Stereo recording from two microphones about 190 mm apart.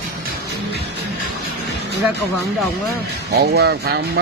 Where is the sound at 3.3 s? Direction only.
60° right (ahead or behind).